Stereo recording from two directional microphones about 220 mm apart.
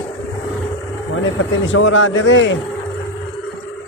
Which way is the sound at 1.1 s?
60° left (ahead or behind).